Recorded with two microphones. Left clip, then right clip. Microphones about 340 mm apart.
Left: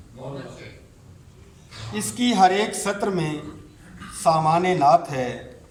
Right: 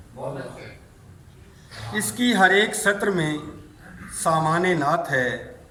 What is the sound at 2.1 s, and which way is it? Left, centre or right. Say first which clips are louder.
A woman's voice: even; centre.